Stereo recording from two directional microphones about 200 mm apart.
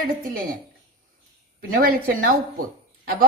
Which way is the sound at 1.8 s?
45° right (ahead or behind).